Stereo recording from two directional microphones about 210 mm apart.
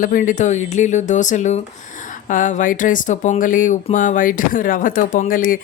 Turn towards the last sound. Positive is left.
turn(degrees=40)  # may be behind; listen again after turning